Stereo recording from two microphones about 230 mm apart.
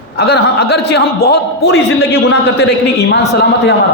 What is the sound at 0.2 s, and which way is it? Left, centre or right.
A man's voice, left.